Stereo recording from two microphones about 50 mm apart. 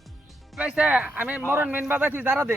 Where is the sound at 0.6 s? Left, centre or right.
Right.